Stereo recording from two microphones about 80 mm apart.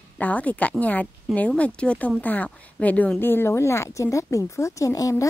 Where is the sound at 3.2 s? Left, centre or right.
Left.